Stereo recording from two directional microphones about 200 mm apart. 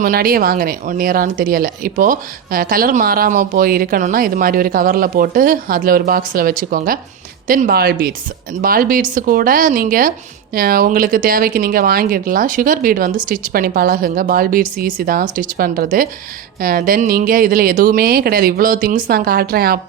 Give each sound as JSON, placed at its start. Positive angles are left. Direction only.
{"t": 0.0, "sound": "speech", "side_deg": -45}